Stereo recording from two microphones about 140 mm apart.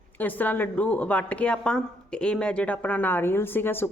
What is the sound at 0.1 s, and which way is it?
Speech, 10° left (ahead or behind).